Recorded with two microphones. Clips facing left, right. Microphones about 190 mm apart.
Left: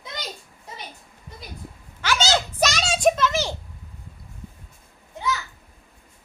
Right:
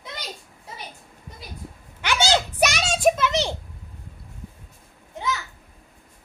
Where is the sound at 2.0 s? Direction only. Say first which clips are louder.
Right 1 dB; 15° right (ahead or behind).